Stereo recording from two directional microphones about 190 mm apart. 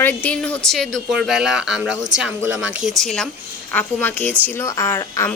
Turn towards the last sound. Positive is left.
turn(degrees=15)  # may be behind; listen again after turning